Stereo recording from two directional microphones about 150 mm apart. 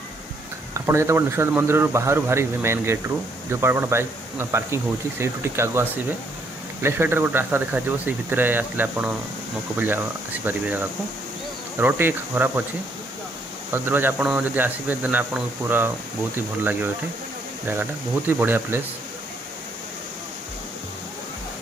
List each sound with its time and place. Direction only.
0.7 s speech: 20° right (ahead or behind)
13.7 s speech: 15° right (ahead or behind)